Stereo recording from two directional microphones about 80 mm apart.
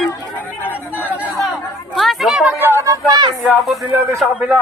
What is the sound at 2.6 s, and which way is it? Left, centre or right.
Speech, right.